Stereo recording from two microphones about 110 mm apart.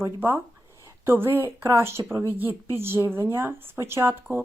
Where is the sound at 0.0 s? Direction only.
20° right (ahead or behind).